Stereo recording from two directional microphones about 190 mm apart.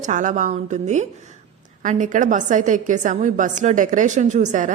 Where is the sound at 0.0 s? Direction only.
40° right (ahead or behind).